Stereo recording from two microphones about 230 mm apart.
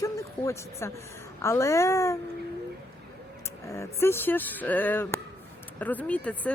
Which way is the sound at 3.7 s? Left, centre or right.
Centre.